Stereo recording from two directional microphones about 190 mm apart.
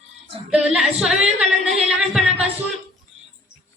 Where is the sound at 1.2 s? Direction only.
35° right (ahead or behind).